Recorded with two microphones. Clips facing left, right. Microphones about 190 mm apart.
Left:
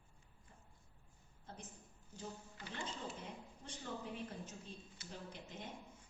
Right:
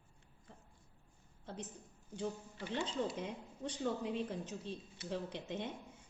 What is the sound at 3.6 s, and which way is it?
A woman's voice, 80° right.